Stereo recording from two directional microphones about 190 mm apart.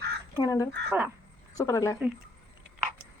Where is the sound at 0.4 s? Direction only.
20° left (ahead or behind).